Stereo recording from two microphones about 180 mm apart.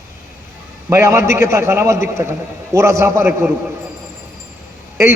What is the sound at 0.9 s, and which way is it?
A man's voice, 15° right (ahead or behind).